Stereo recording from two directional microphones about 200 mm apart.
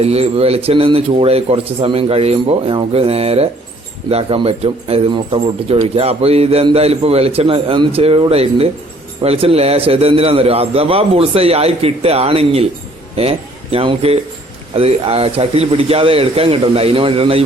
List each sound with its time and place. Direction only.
0.0 s speech: 30° right (ahead or behind)